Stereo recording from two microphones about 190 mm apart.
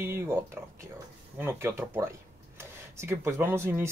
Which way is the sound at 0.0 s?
10° right (ahead or behind).